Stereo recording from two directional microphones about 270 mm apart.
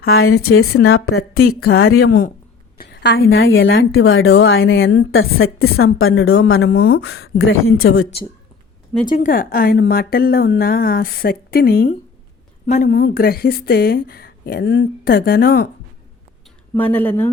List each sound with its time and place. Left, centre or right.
0.0 s a woman's voice: left
9.0 s speech: left
16.7 s speech: centre